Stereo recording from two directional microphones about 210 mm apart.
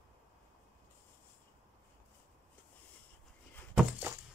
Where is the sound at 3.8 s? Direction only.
5° right (ahead or behind).